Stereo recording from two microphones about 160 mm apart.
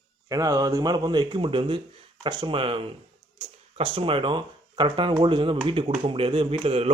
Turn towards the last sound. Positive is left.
turn(degrees=-40)  # may be behind; listen again after turning